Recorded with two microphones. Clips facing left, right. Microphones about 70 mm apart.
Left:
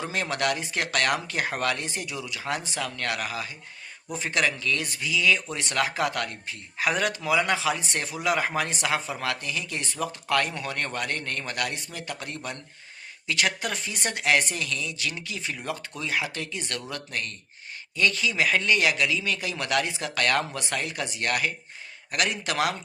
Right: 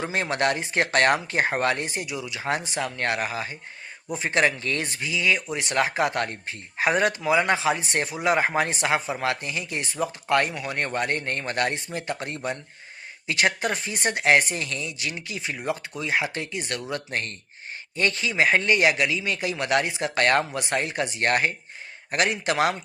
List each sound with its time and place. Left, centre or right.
0.0 s speech: right
17.1 s speech: right